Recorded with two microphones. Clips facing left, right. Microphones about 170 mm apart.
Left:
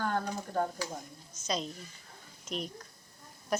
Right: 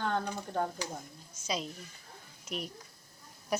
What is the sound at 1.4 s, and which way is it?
Speech, 5° right (ahead or behind).